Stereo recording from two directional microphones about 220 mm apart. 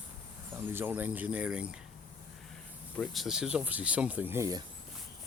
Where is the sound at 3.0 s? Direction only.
Centre (ahead or behind).